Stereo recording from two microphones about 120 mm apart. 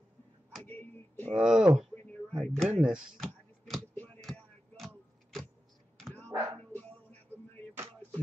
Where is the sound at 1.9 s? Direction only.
15° left (ahead or behind).